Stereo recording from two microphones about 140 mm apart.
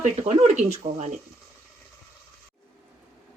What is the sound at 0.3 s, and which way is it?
Speech, 55° right (ahead or behind).